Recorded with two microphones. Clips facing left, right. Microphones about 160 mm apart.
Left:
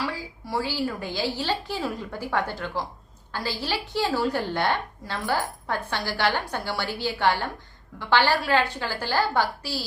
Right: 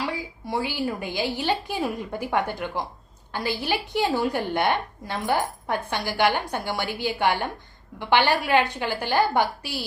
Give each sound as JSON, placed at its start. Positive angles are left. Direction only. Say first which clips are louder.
{"t": 0.1, "sound": "a woman's voice", "louder": "right 2 dB", "side_deg": -20}